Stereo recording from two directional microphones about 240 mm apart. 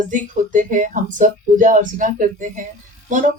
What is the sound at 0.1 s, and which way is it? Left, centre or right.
Speech, right.